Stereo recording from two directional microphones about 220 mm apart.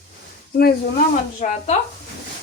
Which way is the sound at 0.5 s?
40° left (ahead or behind).